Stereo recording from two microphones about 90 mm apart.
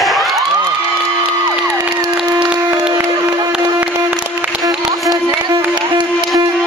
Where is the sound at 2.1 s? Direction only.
10° right (ahead or behind).